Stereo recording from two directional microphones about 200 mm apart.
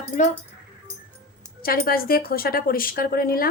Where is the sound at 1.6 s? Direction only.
50° left (ahead or behind).